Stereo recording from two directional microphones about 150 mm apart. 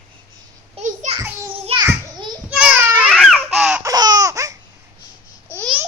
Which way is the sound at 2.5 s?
10° right (ahead or behind).